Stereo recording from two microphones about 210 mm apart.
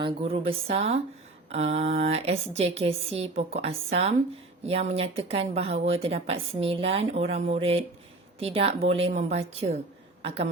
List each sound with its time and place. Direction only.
0.0 s speech: 25° right (ahead or behind)